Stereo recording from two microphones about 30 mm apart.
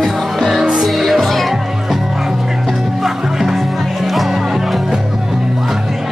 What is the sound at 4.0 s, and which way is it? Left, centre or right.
Music, centre.